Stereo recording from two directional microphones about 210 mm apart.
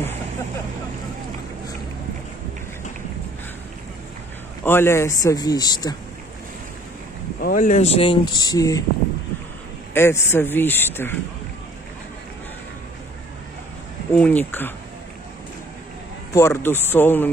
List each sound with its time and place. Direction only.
4.6 s a man's voice: 10° left (ahead or behind)
7.3 s speech: 40° left (ahead or behind); by 8.8 s 15° left (ahead or behind)
9.9 s a man's voice: 10° left (ahead or behind)
14.1 s a man's voice: 5° left (ahead or behind)
16.3 s a man's voice: 15° left (ahead or behind)